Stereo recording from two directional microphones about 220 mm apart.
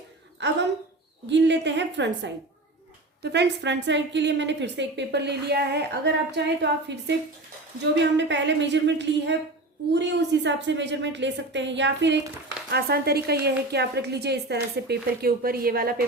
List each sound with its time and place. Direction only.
0.4 s a woman's voice: 55° right (ahead or behind)